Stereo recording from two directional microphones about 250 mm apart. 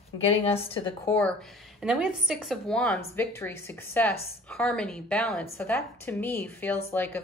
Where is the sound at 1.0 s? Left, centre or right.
Centre.